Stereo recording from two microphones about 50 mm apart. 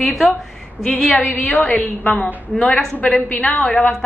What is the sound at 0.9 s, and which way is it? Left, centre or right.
Speech, left.